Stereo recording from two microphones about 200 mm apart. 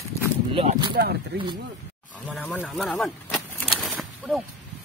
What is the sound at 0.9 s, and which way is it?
Speech, 55° right (ahead or behind).